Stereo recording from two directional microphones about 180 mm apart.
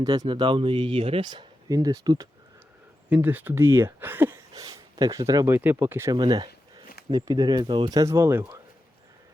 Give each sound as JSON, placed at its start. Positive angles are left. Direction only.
{"t": 0.0, "sound": "speech", "side_deg": -20}
{"t": 3.1, "sound": "speech", "side_deg": -10}